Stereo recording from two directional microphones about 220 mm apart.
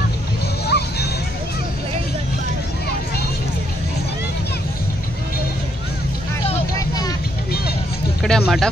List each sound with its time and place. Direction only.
0.7 s music: 50° left (ahead or behind)
8.2 s vehicle: centre (ahead or behind)